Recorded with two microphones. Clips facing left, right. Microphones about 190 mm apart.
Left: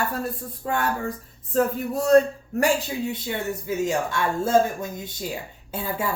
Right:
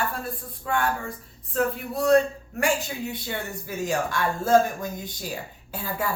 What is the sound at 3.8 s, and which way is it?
Speech, 25° left (ahead or behind).